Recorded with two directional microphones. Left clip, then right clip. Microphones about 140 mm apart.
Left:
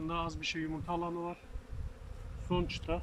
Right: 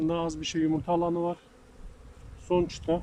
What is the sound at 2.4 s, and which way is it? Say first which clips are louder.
Speech: right 9 dB; 45° right (ahead or behind).